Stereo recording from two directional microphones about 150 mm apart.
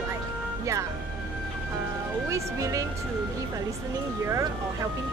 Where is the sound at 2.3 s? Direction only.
20° right (ahead or behind).